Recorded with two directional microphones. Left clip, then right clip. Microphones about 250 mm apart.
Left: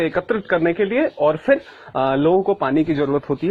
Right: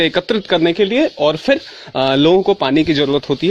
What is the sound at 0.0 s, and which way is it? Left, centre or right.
A man's voice, right.